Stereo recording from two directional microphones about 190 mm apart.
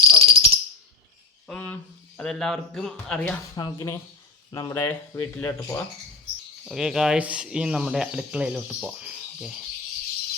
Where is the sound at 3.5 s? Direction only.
20° left (ahead or behind).